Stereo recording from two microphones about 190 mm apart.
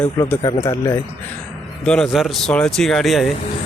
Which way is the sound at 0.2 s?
20° left (ahead or behind).